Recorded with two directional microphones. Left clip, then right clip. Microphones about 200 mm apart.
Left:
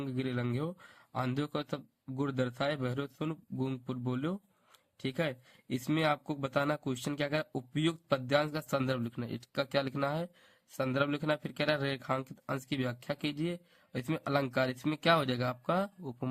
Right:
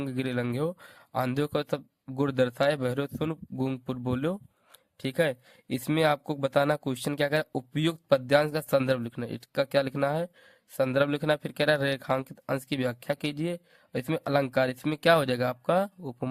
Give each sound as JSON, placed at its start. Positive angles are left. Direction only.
{"t": 0.0, "sound": "speech", "side_deg": -40}